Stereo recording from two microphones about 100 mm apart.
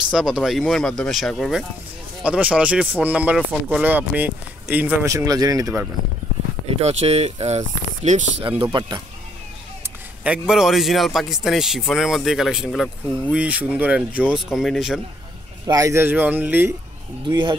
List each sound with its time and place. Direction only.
0.1 s speech: 5° right (ahead or behind)
2.2 s speech: 10° right (ahead or behind)
5.0 s speech: 35° right (ahead or behind)
6.8 s speech: 90° right
8.4 s speech: 65° right (ahead or behind)
8.7 s speech: 45° right (ahead or behind)
10.2 s speech: 10° right (ahead or behind)
14.5 s speech: centre (ahead or behind)
15.6 s speech: 35° right (ahead or behind); by 16.7 s 20° right (ahead or behind)
17.3 s speech: 50° right (ahead or behind)